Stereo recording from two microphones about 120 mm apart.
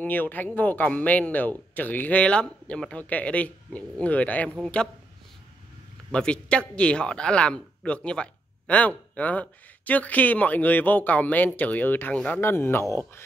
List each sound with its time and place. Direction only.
0.0 s speech: 15° left (ahead or behind)
6.1 s speech: 10° left (ahead or behind)